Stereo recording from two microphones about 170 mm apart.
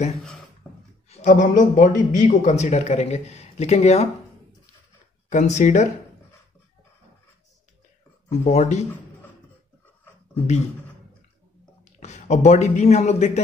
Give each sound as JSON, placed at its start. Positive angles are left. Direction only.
{"t": 1.0, "sound": "speech", "side_deg": 45}
{"t": 5.3, "sound": "speech", "side_deg": 45}
{"t": 8.3, "sound": "speech", "side_deg": 40}
{"t": 11.8, "sound": "a man's voice", "side_deg": 40}